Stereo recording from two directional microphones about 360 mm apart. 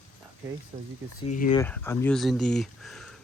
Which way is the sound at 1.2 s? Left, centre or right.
Centre.